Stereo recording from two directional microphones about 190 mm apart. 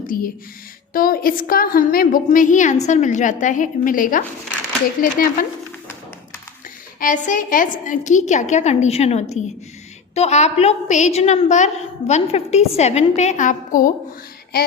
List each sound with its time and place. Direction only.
0.1 s a woman's voice: 50° left (ahead or behind)
7.0 s a woman's voice: 45° left (ahead or behind)